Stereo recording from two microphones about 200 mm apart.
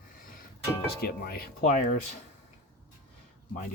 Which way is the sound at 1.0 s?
50° left (ahead or behind).